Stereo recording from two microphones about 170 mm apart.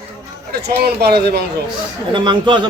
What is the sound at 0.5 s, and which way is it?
Speech, 70° right (ahead or behind).